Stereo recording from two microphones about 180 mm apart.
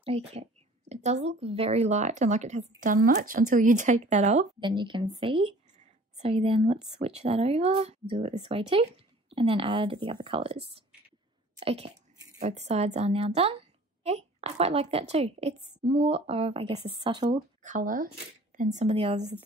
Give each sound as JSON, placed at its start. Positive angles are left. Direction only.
{"t": 0.0, "sound": "speech", "side_deg": -35}
{"t": 4.6, "sound": "speech", "side_deg": -25}
{"t": 17.2, "sound": "speech", "side_deg": -40}